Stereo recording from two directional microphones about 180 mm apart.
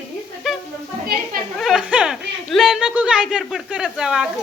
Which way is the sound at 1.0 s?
55° right (ahead or behind).